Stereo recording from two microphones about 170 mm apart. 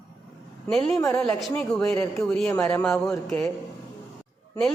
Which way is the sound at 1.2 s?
5° left (ahead or behind).